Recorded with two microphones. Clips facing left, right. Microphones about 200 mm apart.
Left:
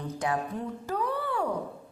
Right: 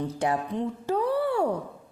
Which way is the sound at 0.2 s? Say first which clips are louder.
Right 2 dB; 25° right (ahead or behind).